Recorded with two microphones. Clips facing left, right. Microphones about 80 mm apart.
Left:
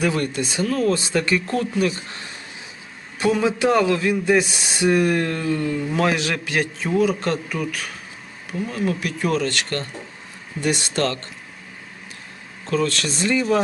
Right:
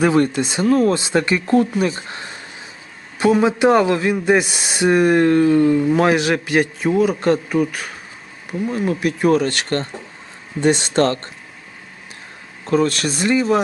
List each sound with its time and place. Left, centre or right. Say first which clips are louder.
0.0 s speech: right 6 dB; right
12.7 s speech: right 5 dB; right